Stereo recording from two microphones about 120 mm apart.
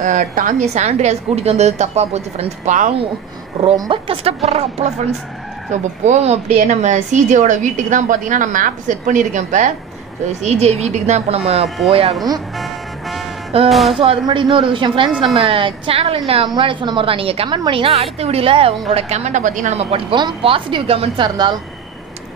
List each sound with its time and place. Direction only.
0.0 s a woman's voice: 90° right
3.7 s speech: 35° right (ahead or behind)
4.1 s a woman's voice: 55° right (ahead or behind)
5.7 s speech: 75° right (ahead or behind)
10.4 s a woman's voice: 65° right (ahead or behind)
12.5 s music: centre (ahead or behind)
13.7 s speech: centre (ahead or behind)
14.2 s a woman's voice: 45° right (ahead or behind)
16.4 s a woman's voice: 40° right (ahead or behind); by 20.2 s 55° right (ahead or behind)
20.2 s a woman's voice: 40° right (ahead or behind)